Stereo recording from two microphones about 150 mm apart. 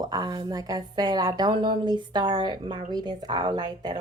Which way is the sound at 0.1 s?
25° right (ahead or behind).